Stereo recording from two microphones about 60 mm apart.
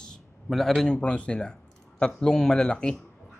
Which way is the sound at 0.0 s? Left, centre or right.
Centre.